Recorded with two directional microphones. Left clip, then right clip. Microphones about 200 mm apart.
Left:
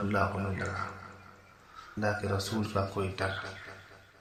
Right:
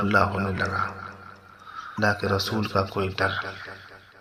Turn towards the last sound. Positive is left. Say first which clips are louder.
# right 8 dB
turn(degrees=-30)  # may be behind; listen again after turning